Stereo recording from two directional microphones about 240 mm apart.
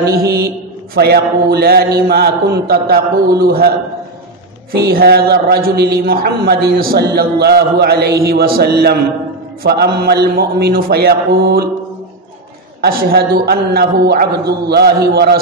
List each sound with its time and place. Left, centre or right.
0.0 s a man's voice: right
4.7 s a man's voice: right
12.8 s a man's voice: right